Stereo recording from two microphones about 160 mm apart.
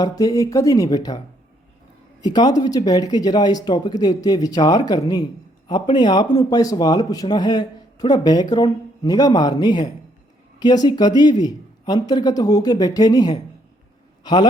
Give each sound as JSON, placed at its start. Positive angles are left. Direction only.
{"t": 0.0, "sound": "speech", "side_deg": 25}
{"t": 2.2, "sound": "speech", "side_deg": 25}